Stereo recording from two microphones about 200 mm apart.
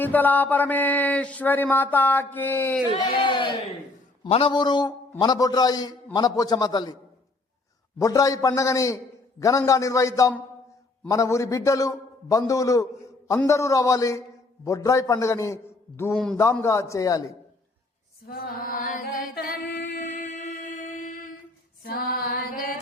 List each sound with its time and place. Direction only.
0.0 s a man's voice: 10° left (ahead or behind)
3.2 s a man's voice: 25° left (ahead or behind)
7.9 s a man's voice: 15° left (ahead or behind)
18.3 s a sound: 45° left (ahead or behind)
21.8 s music: 50° left (ahead or behind)